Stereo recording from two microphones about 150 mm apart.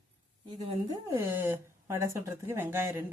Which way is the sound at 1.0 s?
20° right (ahead or behind).